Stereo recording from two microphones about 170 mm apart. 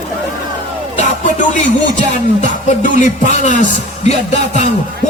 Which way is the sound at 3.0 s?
45° left (ahead or behind).